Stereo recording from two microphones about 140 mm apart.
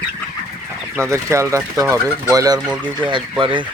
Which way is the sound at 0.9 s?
20° right (ahead or behind).